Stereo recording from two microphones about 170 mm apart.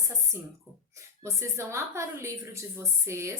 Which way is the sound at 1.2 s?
15° right (ahead or behind).